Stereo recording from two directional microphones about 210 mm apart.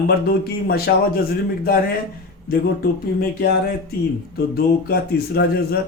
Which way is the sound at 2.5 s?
45° left (ahead or behind).